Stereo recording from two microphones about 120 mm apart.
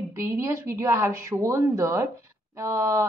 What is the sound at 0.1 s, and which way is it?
Speech, 25° right (ahead or behind).